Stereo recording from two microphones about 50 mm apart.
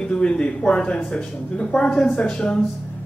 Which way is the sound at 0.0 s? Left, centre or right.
Left.